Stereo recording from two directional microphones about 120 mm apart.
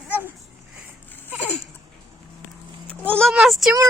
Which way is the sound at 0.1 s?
15° right (ahead or behind).